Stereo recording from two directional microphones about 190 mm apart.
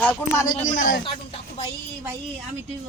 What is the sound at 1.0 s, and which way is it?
Speech, 30° left (ahead or behind).